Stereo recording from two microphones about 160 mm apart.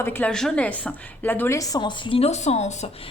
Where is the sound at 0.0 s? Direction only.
10° left (ahead or behind); by 2.9 s 45° left (ahead or behind).